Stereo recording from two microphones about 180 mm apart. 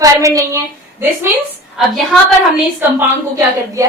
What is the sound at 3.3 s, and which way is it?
Speech, 15° right (ahead or behind).